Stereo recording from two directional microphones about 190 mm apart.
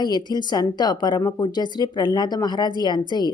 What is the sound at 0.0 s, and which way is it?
A woman's voice, 20° left (ahead or behind).